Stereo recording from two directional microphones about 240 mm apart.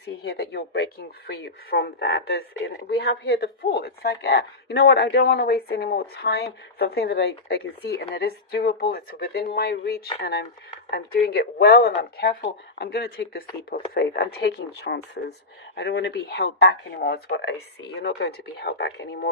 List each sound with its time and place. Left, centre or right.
0.0 s speech: left